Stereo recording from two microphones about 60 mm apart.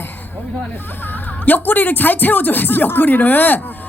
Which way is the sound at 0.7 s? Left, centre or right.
Left.